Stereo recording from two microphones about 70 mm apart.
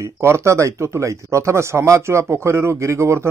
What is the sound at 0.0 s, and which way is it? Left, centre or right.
Speech, right.